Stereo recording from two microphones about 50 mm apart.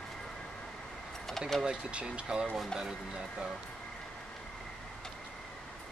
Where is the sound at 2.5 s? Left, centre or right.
Centre.